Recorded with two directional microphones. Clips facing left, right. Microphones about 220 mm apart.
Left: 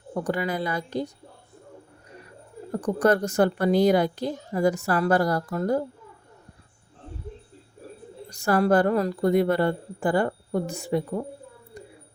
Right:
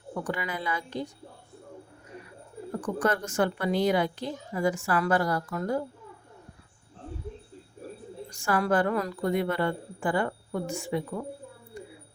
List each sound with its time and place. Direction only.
0.1 s speech: 40° left (ahead or behind)
2.7 s speech: 40° left (ahead or behind)
8.3 s speech: 40° left (ahead or behind)
11.7 s a sound: 35° left (ahead or behind)